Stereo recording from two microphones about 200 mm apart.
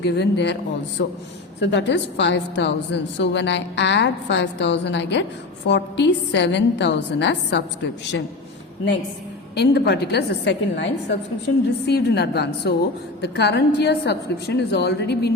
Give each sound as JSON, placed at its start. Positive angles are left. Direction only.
{"t": 0.0, "sound": "a woman's voice", "side_deg": 60}
{"t": 9.6, "sound": "a woman's voice", "side_deg": 55}